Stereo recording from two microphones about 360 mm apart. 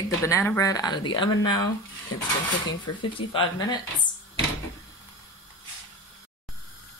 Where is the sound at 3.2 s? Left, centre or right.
Centre.